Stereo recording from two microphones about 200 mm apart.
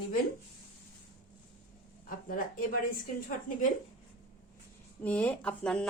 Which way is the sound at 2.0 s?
45° left (ahead or behind).